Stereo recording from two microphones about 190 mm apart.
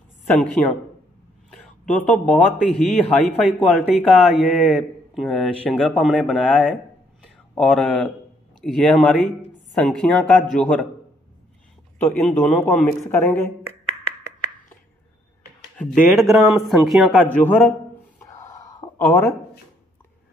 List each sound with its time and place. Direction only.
1.5 s a man's voice: 5° left (ahead or behind)
6.7 s a sound: centre (ahead or behind)
8.5 s a man's voice: 5° left (ahead or behind)
12.0 s speech: 5° left (ahead or behind)
15.8 s a man's voice: centre (ahead or behind)
18.2 s a sound: 15° left (ahead or behind)